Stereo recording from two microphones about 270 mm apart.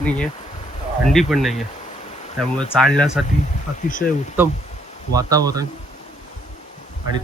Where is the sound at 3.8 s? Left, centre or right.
Left.